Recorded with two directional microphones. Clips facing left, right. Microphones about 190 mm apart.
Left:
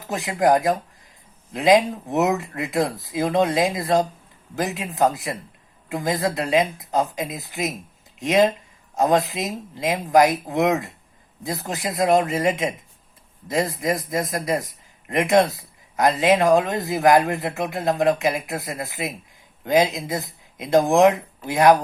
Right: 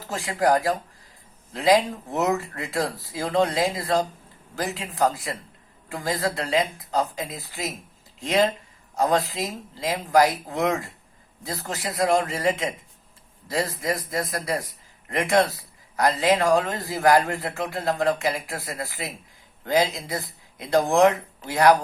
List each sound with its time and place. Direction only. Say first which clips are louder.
0.1 s speech: left 3 dB; 20° left (ahead or behind)